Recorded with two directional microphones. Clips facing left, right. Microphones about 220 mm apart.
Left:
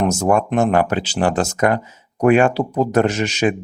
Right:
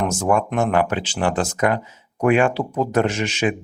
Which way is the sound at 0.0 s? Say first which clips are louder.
Left 3 dB; 40° left (ahead or behind).